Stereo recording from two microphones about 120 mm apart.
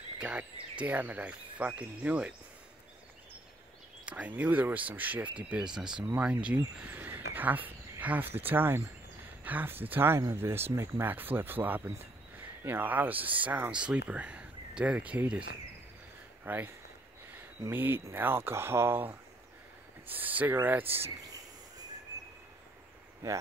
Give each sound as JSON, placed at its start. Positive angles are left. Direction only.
{"t": 0.2, "sound": "speech", "side_deg": -10}
{"t": 4.1, "sound": "speech", "side_deg": -15}
{"t": 16.4, "sound": "speech", "side_deg": -15}
{"t": 20.8, "sound": "speech", "side_deg": -55}